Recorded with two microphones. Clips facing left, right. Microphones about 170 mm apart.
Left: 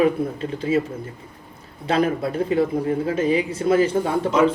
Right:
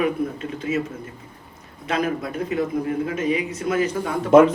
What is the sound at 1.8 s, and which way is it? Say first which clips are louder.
A man's voice: left 4 dB; 30° left (ahead or behind).